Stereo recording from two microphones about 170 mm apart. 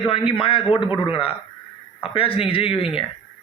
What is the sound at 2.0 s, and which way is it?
A man's voice, 35° left (ahead or behind).